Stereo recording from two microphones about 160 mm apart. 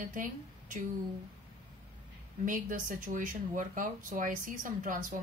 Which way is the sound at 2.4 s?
55° right (ahead or behind).